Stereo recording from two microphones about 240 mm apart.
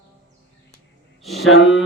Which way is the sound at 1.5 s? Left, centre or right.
Left.